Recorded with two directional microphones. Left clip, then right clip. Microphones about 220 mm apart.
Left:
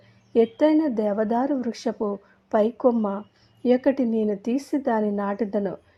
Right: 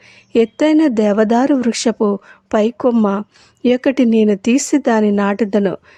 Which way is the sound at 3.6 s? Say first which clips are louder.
Right 6 dB; 55° right (ahead or behind).